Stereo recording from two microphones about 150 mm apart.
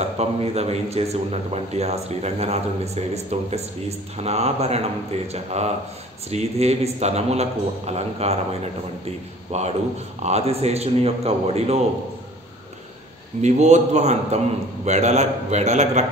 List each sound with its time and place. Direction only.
0.0 s a man's voice: 45° right (ahead or behind)
13.4 s a man's voice: 50° right (ahead or behind)